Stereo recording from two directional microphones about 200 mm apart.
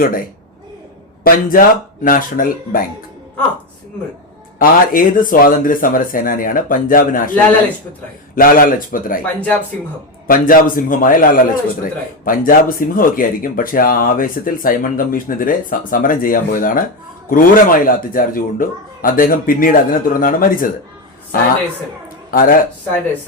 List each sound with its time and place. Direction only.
0.0 s a man's voice: 45° left (ahead or behind)
4.6 s a man's voice: 45° left (ahead or behind)
8.4 s a man's voice: 45° left (ahead or behind)
9.2 s speech: 5° left (ahead or behind)
10.2 s a man's voice: 45° left (ahead or behind)